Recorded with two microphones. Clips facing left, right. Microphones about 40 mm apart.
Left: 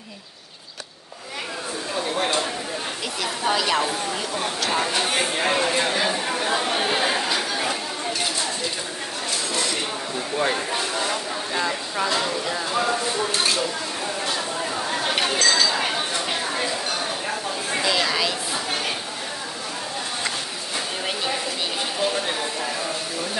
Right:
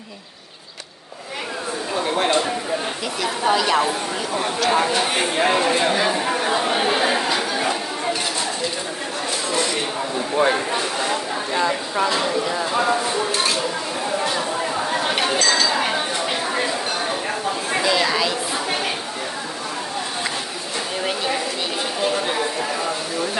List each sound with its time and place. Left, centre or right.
2.0 s a sound: right
3.2 s a woman's voice: centre
9.5 s a sound: centre
11.9 s speech: centre
13.3 s a woman's voice: centre
14.2 s chink: centre
17.7 s speech: centre